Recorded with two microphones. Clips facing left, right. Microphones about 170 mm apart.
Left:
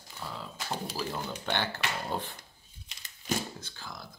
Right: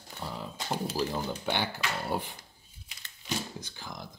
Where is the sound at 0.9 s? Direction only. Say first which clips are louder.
Right 4 dB; 5° right (ahead or behind).